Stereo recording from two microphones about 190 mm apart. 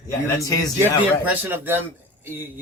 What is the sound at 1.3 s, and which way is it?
Speech, 10° right (ahead or behind).